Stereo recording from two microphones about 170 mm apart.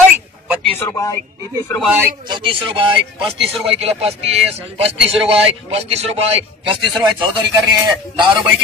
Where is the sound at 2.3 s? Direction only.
30° right (ahead or behind).